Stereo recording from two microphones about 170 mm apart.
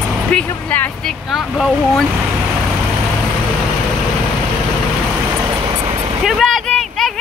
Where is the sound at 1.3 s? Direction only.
Centre (ahead or behind).